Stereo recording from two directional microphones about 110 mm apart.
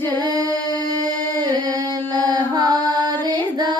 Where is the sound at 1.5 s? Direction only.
40° right (ahead or behind).